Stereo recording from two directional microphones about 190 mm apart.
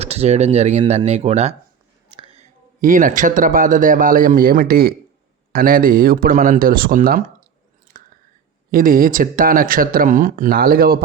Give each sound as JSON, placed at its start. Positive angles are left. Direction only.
{"t": 0.0, "sound": "speech", "side_deg": -35}
{"t": 8.7, "sound": "speech", "side_deg": -45}